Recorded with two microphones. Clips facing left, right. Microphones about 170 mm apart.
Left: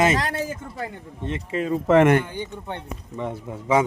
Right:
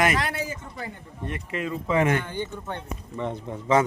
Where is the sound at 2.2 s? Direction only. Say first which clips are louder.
Even; 15° left (ahead or behind).